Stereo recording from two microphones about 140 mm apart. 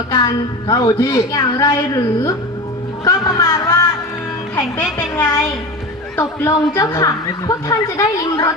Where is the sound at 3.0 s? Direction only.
25° left (ahead or behind).